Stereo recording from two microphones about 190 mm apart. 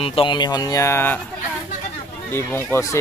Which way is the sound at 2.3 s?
10° left (ahead or behind).